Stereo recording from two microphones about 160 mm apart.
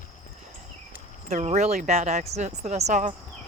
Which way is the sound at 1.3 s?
45° right (ahead or behind).